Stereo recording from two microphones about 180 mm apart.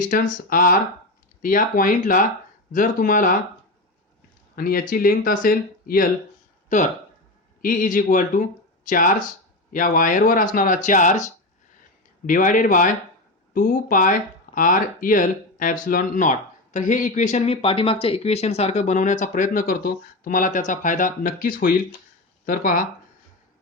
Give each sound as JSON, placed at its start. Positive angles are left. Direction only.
{"t": 0.1, "sound": "speech", "side_deg": 50}
{"t": 4.5, "sound": "speech", "side_deg": 55}